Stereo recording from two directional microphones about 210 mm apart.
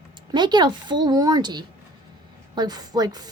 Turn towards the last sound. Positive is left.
turn(degrees=-20)  # may be behind; listen again after turning